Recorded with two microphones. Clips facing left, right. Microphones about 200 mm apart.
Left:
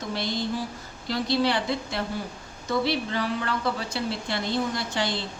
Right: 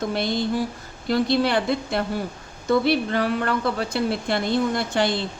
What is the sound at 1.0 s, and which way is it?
A woman's voice, 55° right (ahead or behind).